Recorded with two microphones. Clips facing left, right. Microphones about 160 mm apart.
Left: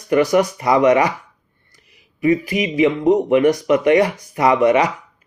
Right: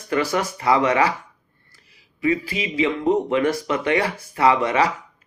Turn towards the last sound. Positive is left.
turn(degrees=15)  # may be behind; listen again after turning